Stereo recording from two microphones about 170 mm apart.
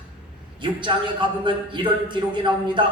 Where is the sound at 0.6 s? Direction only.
30° right (ahead or behind).